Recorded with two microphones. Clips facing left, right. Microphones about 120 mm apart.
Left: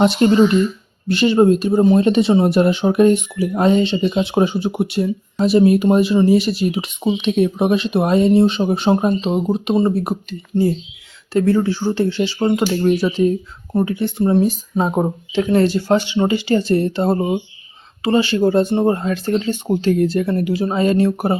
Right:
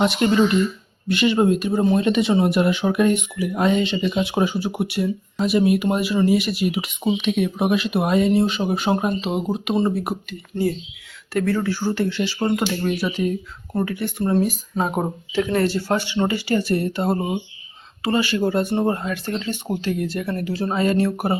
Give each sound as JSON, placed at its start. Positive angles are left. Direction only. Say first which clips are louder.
{"t": 0.0, "sound": "speech", "louder": "left 5 dB", "side_deg": 35}
{"t": 13.1, "sound": "speech", "louder": "left 6 dB", "side_deg": 30}